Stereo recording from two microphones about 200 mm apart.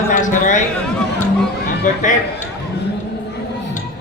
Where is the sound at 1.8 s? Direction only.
40° left (ahead or behind).